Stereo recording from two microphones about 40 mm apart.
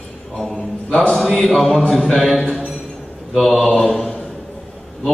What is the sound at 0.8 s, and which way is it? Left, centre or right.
Speech, left.